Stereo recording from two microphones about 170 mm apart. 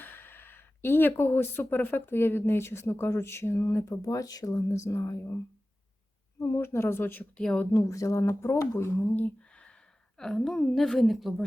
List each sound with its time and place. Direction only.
0.0 s speech: 10° left (ahead or behind)
6.4 s speech: 15° left (ahead or behind)
7.7 s a woman's voice: 20° left (ahead or behind); by 11.4 s centre (ahead or behind)